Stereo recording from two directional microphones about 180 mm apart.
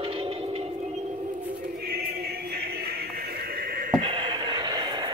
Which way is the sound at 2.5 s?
60° right (ahead or behind).